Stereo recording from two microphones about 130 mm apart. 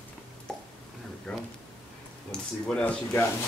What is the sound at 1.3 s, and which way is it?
Speech, 5° left (ahead or behind).